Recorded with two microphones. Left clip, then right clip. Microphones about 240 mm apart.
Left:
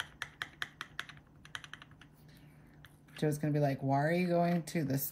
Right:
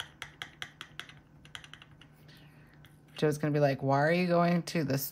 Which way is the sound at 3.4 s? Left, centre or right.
Centre.